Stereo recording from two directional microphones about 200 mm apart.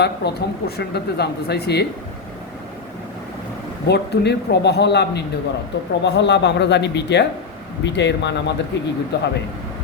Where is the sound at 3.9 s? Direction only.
55° left (ahead or behind).